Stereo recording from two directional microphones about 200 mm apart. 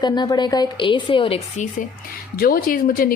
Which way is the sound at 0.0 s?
20° left (ahead or behind).